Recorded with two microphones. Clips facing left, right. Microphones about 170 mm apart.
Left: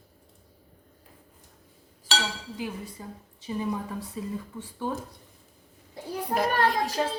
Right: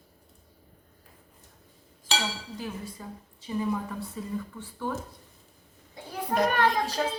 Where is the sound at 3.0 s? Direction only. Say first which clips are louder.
Even; 15° left (ahead or behind).